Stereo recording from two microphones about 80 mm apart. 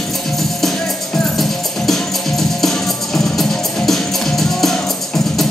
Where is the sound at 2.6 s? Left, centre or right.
Centre.